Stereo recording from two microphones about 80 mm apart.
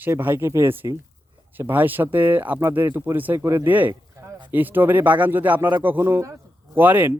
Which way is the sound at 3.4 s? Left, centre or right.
Right.